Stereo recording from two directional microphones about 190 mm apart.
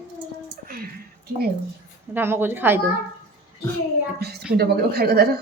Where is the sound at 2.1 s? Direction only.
10° right (ahead or behind).